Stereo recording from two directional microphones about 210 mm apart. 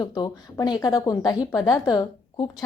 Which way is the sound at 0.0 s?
20° left (ahead or behind).